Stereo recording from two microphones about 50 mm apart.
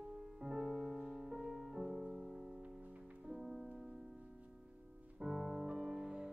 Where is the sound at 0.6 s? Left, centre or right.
Centre.